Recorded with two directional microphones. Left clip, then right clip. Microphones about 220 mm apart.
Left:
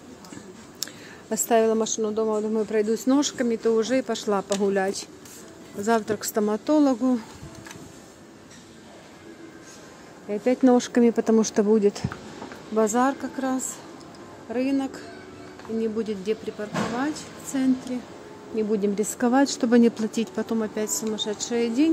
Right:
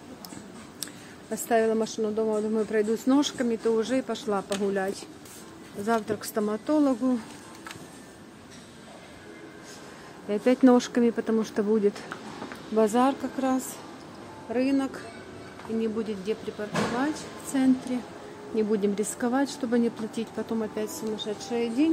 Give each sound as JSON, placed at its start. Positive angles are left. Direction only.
{"t": 1.3, "sound": "a woman's voice", "side_deg": 20}
{"t": 10.3, "sound": "speech", "side_deg": 0}
{"t": 10.9, "sound": "a woman's voice", "side_deg": 20}
{"t": 15.8, "sound": "a woman's voice", "side_deg": 15}
{"t": 18.9, "sound": "speech", "side_deg": 25}